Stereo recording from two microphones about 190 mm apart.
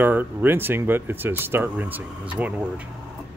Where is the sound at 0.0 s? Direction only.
10° right (ahead or behind).